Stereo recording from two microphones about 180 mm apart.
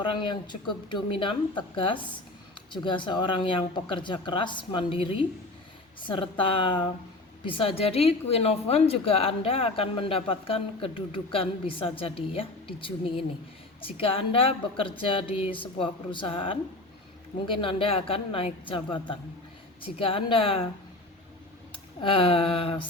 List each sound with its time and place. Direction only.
0.1 s a woman's voice: 25° left (ahead or behind)
22.0 s a woman's voice: 30° left (ahead or behind)